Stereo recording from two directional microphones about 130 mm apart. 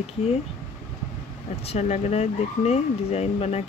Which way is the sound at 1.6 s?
55° left (ahead or behind).